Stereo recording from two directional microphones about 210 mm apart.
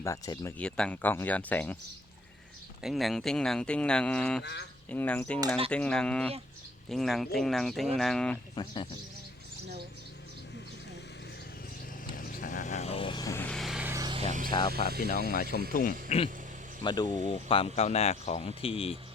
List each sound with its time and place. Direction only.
0.0 s speech: 15° left (ahead or behind)
2.8 s speech: centre (ahead or behind)
8.5 s speech: 25° left (ahead or behind)
12.1 s vehicle: 40° left (ahead or behind); by 13.9 s 5° right (ahead or behind)
13.9 s a sound: 20° right (ahead or behind)
14.3 s a sound: 35° right (ahead or behind)
15.3 s speech: 45° left (ahead or behind)
16.0 s speech: 30° left (ahead or behind)